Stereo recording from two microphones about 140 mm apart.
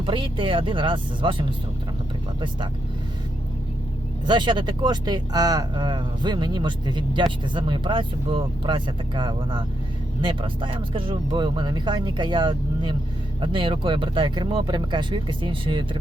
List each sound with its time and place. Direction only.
0.0 s speech: 35° right (ahead or behind)
4.3 s speech: 35° right (ahead or behind)